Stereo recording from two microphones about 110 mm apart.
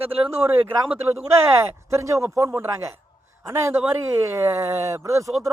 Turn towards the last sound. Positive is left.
turn(degrees=-30)  # may be behind; listen again after turning